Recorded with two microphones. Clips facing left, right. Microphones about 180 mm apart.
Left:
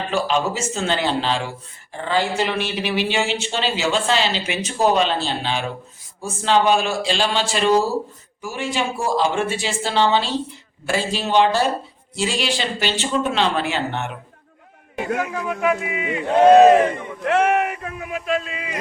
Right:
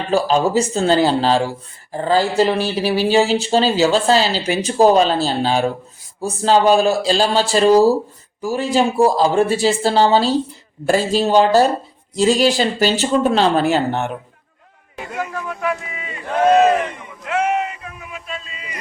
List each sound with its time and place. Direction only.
0.1 s speech: 35° right (ahead or behind)
15.3 s speech: 15° left (ahead or behind)
16.6 s speech: 40° left (ahead or behind)
17.2 s speech: 70° left (ahead or behind)